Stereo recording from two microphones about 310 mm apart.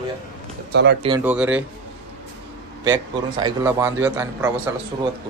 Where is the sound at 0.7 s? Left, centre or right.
Right.